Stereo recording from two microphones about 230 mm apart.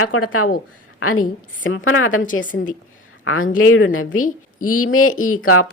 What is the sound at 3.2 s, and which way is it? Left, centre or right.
A woman's voice, left.